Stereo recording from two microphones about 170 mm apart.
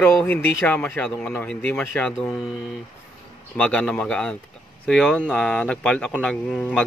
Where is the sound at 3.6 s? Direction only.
5° left (ahead or behind).